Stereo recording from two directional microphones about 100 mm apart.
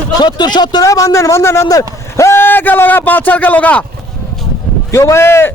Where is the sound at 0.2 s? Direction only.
45° left (ahead or behind).